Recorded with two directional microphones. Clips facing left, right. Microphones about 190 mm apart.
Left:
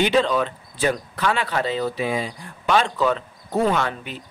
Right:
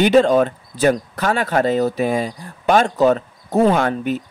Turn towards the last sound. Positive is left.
turn(degrees=-45)  # may be behind; listen again after turning